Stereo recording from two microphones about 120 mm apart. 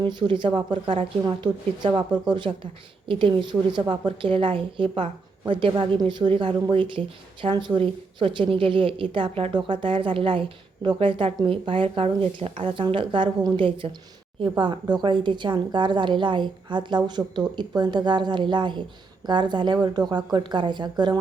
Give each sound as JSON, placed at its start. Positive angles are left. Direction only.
{"t": 0.0, "sound": "a woman's voice", "side_deg": -40}